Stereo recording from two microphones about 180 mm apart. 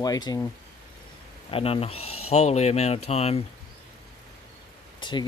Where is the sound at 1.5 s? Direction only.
30° left (ahead or behind).